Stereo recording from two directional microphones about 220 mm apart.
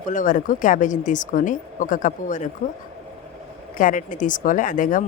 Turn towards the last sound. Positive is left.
turn(degrees=35)  # may be behind; listen again after turning